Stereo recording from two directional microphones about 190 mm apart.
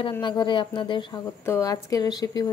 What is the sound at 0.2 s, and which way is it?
Speech, 25° left (ahead or behind).